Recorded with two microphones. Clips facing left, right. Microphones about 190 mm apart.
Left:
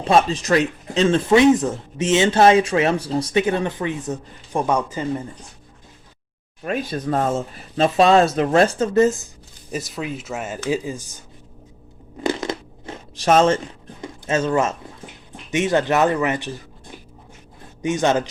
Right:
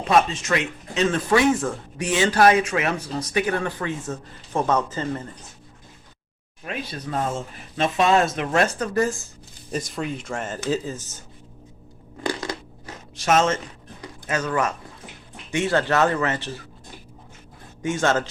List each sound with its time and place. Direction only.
0.1 s speech: 30° left (ahead or behind); by 5.3 s 10° left (ahead or behind)
6.6 s speech: 45° left (ahead or behind); by 9.3 s 20° left (ahead or behind)
9.7 s speech: 5° left (ahead or behind)
12.2 s a sound: 20° left (ahead or behind)
14.0 s speech: 25° left (ahead or behind)
17.8 s speech: 15° left (ahead or behind)